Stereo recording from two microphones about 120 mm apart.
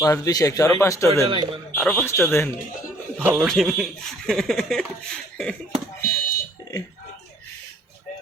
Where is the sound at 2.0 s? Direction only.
20° left (ahead or behind).